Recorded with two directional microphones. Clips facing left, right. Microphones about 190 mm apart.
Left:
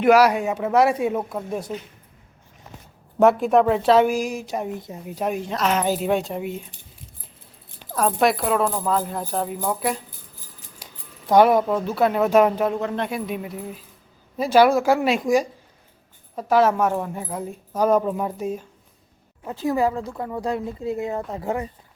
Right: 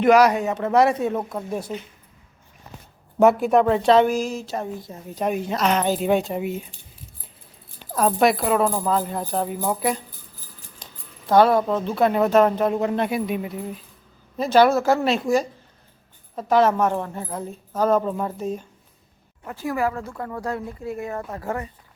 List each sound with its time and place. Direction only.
0.0 s a woman's voice: 5° left (ahead or behind)
3.2 s a woman's voice: centre (ahead or behind)
7.9 s speech: centre (ahead or behind)
10.8 s a sound: 15° left (ahead or behind)
11.6 s a woman's voice: 5° left (ahead or behind)
12.7 s a woman's voice: 10° right (ahead or behind); by 21.7 s 15° left (ahead or behind)